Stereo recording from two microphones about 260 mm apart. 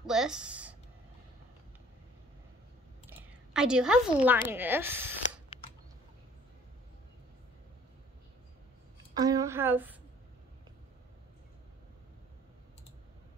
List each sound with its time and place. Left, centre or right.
0.0 s a sound: centre
3.1 s a woman's voice: centre
9.2 s a woman's voice: centre